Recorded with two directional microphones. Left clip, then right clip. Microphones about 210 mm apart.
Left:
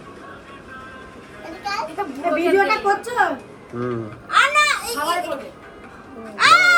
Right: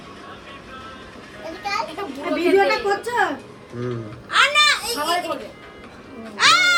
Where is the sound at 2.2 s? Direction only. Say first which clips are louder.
Even; centre (ahead or behind).